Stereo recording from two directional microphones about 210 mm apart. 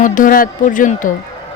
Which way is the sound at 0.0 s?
40° left (ahead or behind).